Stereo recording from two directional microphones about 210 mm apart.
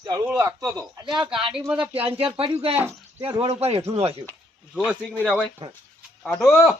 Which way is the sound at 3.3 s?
30° right (ahead or behind).